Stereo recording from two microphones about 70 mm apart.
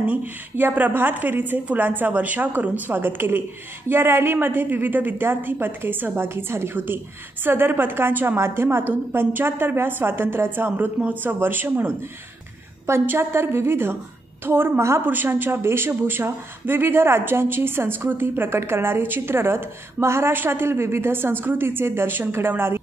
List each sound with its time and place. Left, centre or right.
0.0 s a woman's voice: right
13.0 s speech: right